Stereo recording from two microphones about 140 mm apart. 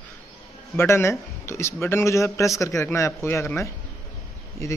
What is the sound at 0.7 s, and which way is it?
A man's voice, 20° left (ahead or behind).